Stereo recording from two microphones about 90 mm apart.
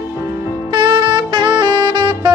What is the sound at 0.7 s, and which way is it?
Saxophone, 60° right (ahead or behind).